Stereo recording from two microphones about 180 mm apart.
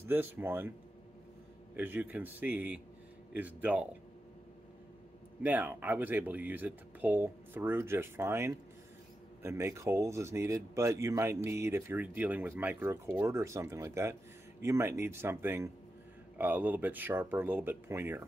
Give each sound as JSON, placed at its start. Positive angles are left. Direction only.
{"t": 0.1, "sound": "speech", "side_deg": -10}
{"t": 1.8, "sound": "speech", "side_deg": -10}
{"t": 5.4, "sound": "speech", "side_deg": -10}